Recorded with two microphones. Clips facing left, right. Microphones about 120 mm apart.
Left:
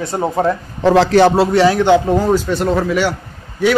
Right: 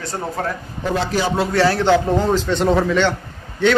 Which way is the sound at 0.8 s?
90° left.